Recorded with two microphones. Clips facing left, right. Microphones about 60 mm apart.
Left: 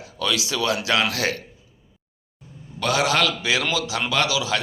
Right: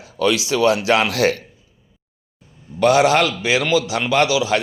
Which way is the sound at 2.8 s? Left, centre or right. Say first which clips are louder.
Right 7 dB; right.